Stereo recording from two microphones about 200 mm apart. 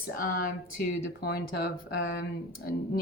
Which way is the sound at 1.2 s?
50° left (ahead or behind).